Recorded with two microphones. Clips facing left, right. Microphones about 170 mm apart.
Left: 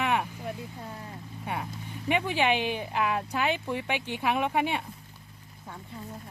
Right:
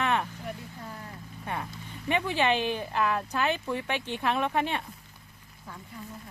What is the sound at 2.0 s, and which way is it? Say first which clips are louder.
Speech: even; 15° left (ahead or behind).